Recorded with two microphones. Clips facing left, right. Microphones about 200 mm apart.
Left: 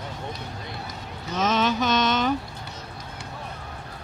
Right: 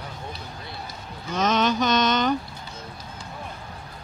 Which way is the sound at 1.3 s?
Centre (ahead or behind).